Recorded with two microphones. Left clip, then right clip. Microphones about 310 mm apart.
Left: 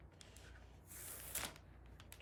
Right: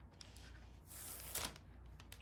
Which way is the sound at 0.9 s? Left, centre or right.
Centre.